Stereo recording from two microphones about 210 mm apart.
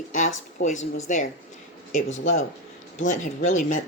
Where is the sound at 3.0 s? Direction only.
35° left (ahead or behind).